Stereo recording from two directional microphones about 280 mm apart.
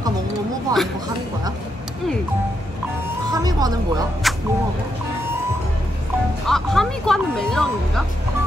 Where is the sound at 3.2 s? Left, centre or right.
Centre.